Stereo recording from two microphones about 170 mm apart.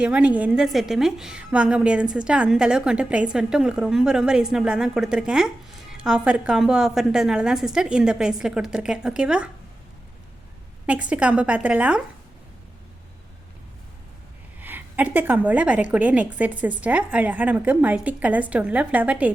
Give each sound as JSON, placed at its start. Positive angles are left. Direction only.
{"t": 0.0, "sound": "a woman's voice", "side_deg": -5}
{"t": 10.8, "sound": "a woman's voice", "side_deg": -10}
{"t": 14.6, "sound": "a woman's voice", "side_deg": -10}